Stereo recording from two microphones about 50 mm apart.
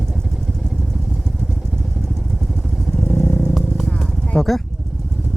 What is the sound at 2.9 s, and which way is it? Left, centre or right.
Vehicle, left.